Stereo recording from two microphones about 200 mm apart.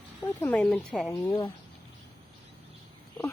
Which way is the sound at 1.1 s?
20° left (ahead or behind).